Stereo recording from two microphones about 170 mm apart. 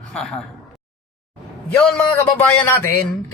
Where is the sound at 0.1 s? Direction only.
5° left (ahead or behind).